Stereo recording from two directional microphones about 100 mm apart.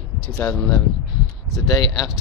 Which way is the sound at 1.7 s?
45° left (ahead or behind).